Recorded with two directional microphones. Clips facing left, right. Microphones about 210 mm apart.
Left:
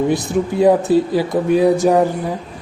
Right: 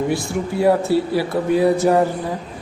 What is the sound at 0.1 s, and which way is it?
A man's voice, 20° left (ahead or behind).